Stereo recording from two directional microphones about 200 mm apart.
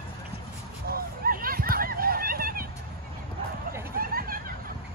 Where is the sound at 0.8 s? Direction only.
50° right (ahead or behind).